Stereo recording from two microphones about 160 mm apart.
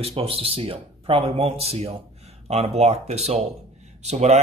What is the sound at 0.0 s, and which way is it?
Speech, 40° right (ahead or behind).